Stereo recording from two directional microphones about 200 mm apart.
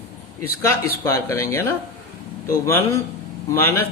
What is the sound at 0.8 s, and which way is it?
A man's voice, 15° left (ahead or behind).